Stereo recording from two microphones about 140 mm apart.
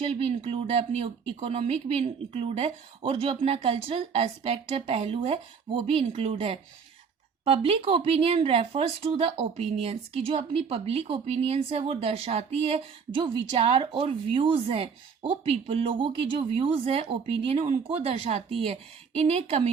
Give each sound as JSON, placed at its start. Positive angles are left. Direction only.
{"t": 0.0, "sound": "a woman's voice", "side_deg": -45}